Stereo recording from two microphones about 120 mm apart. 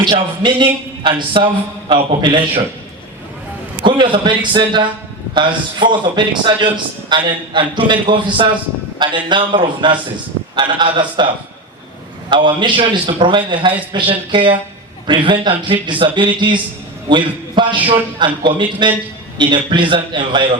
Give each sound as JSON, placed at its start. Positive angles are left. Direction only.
{"t": 0.0, "sound": "a man's voice", "side_deg": -40}
{"t": 3.8, "sound": "a man's voice", "side_deg": -40}
{"t": 12.3, "sound": "a man's voice", "side_deg": -40}